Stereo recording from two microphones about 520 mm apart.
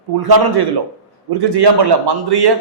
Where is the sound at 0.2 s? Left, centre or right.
Right.